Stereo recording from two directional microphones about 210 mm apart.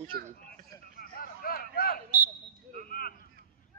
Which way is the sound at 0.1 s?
45° right (ahead or behind).